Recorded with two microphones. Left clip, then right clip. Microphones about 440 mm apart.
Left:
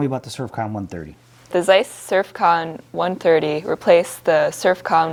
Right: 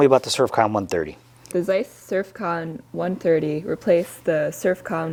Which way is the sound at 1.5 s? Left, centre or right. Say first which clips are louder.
Left 7 dB; left.